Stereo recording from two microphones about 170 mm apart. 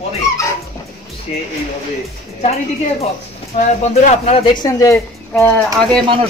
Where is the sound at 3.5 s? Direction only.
40° left (ahead or behind).